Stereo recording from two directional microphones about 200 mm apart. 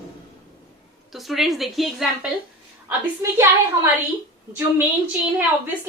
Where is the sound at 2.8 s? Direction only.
10° right (ahead or behind).